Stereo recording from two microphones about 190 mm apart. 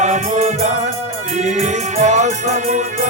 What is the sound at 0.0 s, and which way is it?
Music, 40° right (ahead or behind).